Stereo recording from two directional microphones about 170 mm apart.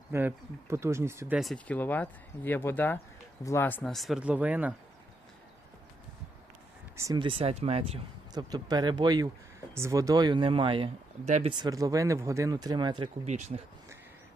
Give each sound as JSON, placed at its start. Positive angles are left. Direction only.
{"t": 0.1, "sound": "speech", "side_deg": -15}
{"t": 1.4, "sound": "speech", "side_deg": 5}
{"t": 6.9, "sound": "speech", "side_deg": -25}
{"t": 8.3, "sound": "speech", "side_deg": -25}
{"t": 11.6, "sound": "speech", "side_deg": -20}
{"t": 13.2, "sound": "speech", "side_deg": -40}